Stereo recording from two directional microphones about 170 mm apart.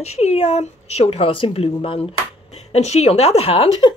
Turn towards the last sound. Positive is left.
turn(degrees=30)  # may be behind; listen again after turning